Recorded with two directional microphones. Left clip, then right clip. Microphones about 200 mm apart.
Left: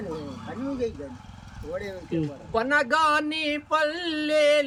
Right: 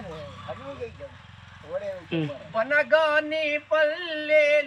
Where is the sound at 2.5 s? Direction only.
30° left (ahead or behind).